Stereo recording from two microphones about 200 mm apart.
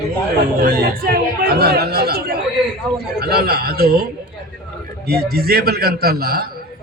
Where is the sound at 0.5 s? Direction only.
45° right (ahead or behind).